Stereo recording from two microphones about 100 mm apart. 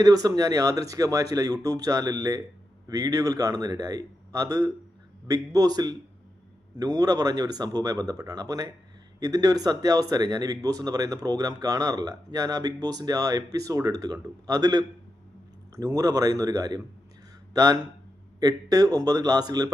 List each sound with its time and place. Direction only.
0.0 s speech: 40° right (ahead or behind)